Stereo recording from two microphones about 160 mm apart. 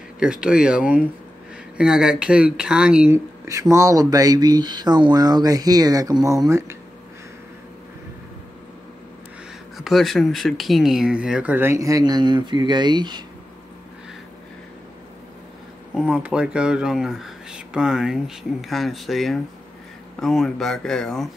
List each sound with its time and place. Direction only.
0.2 s speech: 5° right (ahead or behind)
3.7 s speech: 20° right (ahead or behind)
9.8 s speech: centre (ahead or behind); by 13.2 s 30° right (ahead or behind)
16.0 s speech: 5° right (ahead or behind)